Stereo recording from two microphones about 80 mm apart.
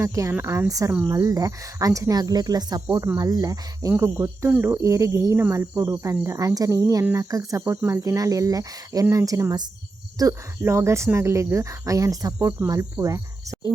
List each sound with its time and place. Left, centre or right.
0.0 s speech: right
3.9 s speech: right
10.6 s speech: right